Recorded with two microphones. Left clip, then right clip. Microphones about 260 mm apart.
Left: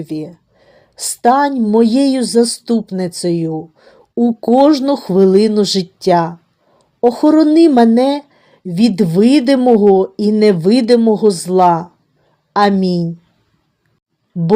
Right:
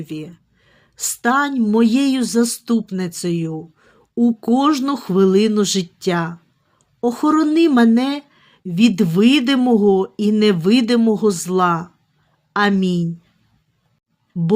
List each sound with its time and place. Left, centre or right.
0.0 s a woman's voice: centre
4.2 s speech: centre
4.6 s speech: centre